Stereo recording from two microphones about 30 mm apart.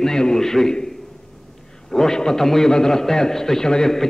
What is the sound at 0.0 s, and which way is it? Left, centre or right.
Speech, centre.